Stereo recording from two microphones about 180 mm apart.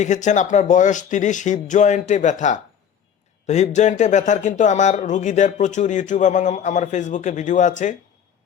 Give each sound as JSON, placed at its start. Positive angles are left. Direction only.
{"t": 0.0, "sound": "speech", "side_deg": 40}
{"t": 3.4, "sound": "speech", "side_deg": 40}